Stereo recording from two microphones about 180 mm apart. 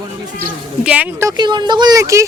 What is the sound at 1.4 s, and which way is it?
Speech, 25° right (ahead or behind).